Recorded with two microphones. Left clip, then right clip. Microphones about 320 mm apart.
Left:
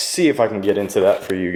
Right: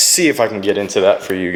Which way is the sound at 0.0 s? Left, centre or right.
Centre.